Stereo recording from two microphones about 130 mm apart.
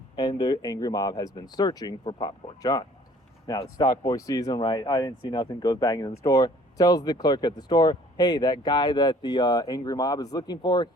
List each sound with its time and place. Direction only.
0.2 s speech: 30° left (ahead or behind)